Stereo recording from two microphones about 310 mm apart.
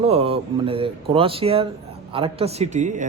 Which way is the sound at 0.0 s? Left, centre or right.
Centre.